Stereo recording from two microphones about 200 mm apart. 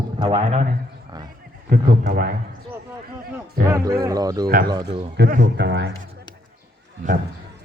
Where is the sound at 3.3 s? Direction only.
15° right (ahead or behind).